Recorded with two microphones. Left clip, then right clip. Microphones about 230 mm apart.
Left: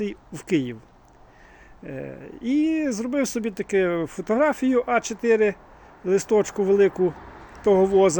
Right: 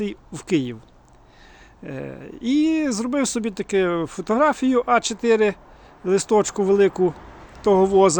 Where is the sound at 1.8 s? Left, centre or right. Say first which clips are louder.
Right 2 dB; centre.